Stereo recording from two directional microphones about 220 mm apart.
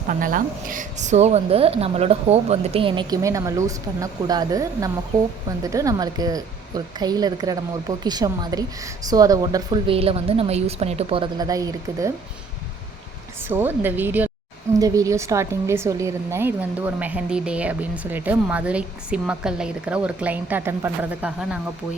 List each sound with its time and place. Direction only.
0.1 s a woman's voice: 40° right (ahead or behind); by 12.1 s 15° right (ahead or behind)
13.5 s speech: 10° right (ahead or behind)